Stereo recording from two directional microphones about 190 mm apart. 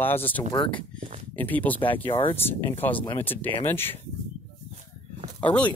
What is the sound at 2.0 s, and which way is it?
Speech, 25° left (ahead or behind).